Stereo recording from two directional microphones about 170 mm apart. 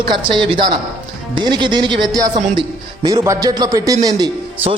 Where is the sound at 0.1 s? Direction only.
30° right (ahead or behind).